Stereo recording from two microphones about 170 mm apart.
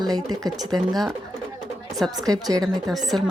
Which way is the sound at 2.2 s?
20° right (ahead or behind).